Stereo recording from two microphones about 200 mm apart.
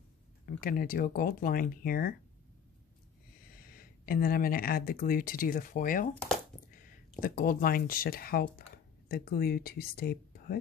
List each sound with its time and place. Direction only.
0.6 s speech: 45° left (ahead or behind)
3.5 s speech: 45° left (ahead or behind)